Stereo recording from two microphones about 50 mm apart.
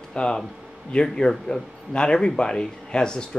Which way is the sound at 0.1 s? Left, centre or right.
Centre.